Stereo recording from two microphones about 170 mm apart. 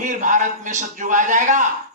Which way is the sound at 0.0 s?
50° right (ahead or behind).